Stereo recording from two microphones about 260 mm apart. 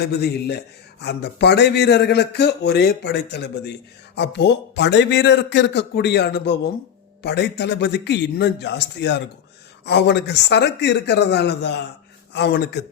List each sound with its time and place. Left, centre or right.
0.0 s speech: left